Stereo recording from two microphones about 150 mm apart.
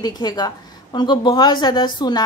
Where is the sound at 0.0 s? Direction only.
25° left (ahead or behind).